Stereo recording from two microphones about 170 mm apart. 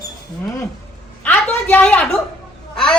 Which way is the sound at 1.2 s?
10° left (ahead or behind).